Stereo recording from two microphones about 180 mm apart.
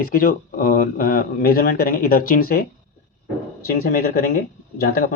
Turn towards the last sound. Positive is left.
turn(degrees=55)  # may be behind; listen again after turning